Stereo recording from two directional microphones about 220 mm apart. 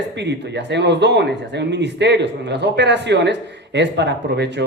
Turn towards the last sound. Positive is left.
turn(degrees=-50)  # may be behind; listen again after turning